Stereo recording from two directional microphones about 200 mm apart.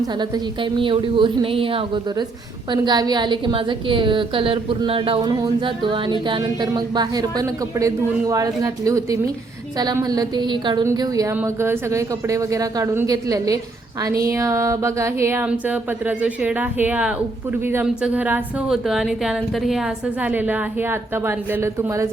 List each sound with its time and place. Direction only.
0.0 s a woman's voice: 25° right (ahead or behind)